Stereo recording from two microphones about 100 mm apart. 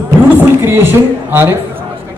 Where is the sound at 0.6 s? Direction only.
20° right (ahead or behind).